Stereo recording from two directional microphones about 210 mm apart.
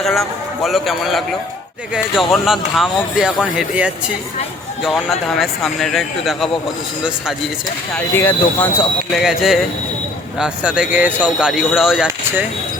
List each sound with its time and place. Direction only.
0.0 s a man's voice: centre (ahead or behind)
7.9 s speech: 10° left (ahead or behind)